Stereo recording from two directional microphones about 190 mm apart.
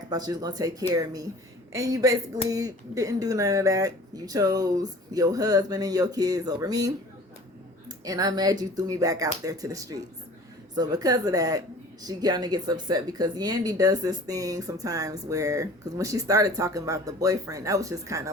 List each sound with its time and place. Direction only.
0.1 s speech: 20° right (ahead or behind)